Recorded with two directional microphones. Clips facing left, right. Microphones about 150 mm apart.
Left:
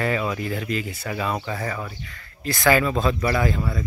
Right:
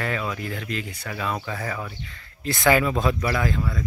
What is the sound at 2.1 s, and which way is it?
Speech, 25° right (ahead or behind).